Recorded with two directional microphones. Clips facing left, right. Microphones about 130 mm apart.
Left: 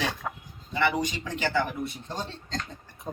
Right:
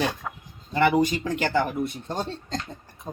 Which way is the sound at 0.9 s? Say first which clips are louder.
Right 7 dB; 50° right (ahead or behind).